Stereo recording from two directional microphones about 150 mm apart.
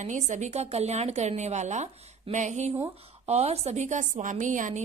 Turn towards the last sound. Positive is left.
turn(degrees=-55)  # may be behind; listen again after turning